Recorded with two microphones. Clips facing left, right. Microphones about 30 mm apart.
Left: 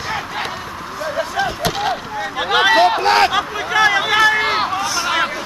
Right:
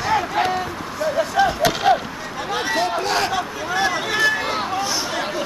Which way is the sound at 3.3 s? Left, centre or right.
Left.